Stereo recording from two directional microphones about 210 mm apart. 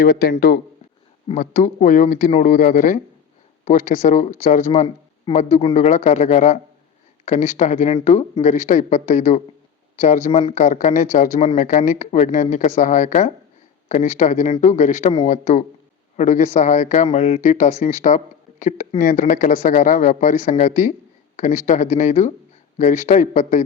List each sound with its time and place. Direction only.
0.0 s speech: 45° left (ahead or behind)